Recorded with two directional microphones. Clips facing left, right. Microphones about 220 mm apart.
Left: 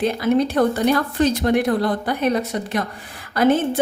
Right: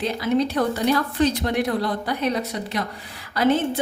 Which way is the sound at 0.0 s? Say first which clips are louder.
Left 3 dB; 50° left (ahead or behind).